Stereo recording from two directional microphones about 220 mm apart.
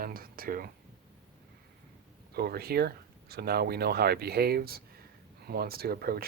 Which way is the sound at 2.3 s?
45° right (ahead or behind).